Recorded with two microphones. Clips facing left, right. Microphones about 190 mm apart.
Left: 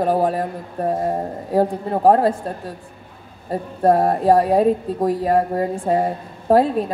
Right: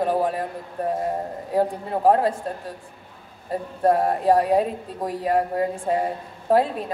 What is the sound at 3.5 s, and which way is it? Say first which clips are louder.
A woman's voice: left 4 dB; 40° left (ahead or behind).